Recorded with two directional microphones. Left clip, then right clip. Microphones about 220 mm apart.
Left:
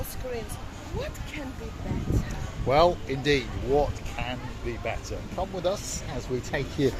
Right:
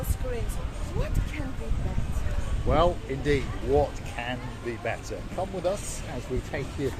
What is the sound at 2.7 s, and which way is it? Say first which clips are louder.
Speech: left 3 dB; 35° left (ahead or behind).